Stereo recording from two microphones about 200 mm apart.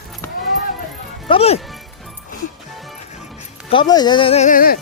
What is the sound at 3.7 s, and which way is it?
Speech, 20° left (ahead or behind).